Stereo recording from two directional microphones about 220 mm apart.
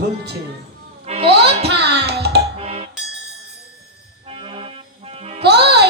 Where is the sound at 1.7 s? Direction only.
50° right (ahead or behind).